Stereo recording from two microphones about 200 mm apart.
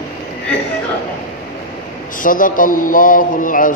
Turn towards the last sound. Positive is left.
turn(degrees=40)  # may be behind; listen again after turning